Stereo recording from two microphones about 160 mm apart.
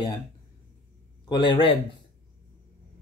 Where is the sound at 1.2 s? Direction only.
30° left (ahead or behind).